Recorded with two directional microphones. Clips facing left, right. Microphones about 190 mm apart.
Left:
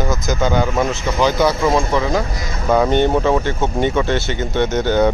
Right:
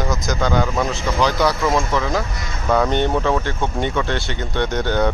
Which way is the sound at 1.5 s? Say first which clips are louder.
Left 3 dB; 25° left (ahead or behind).